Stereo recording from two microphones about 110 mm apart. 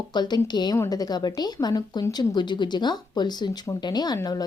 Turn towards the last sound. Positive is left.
turn(degrees=40)  # may be behind; listen again after turning